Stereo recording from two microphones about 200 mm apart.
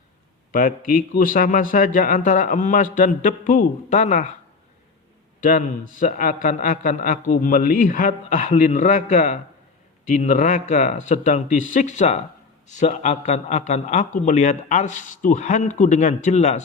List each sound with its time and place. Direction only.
0.5 s a man's voice: 45° left (ahead or behind)
5.4 s a man's voice: 40° left (ahead or behind)